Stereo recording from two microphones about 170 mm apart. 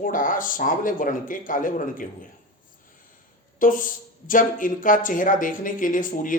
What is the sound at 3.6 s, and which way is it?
Speech, 50° left (ahead or behind).